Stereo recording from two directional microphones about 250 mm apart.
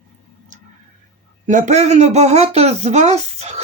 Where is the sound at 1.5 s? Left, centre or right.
Right.